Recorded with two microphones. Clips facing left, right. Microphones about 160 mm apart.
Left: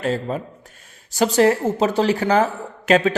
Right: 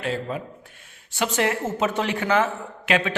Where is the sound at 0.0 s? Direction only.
40° left (ahead or behind).